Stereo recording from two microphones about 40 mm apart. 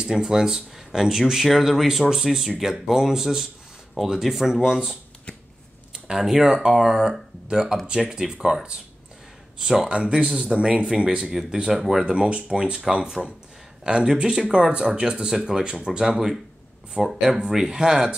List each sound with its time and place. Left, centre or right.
0.0 s speech: centre
6.0 s speech: centre
8.5 s speech: right
9.8 s speech: right
10.1 s speech: centre
10.5 s speech: right
11.5 s speech: centre
12.1 s speech: right
12.9 s speech: centre
13.8 s speech: centre
16.9 s speech: centre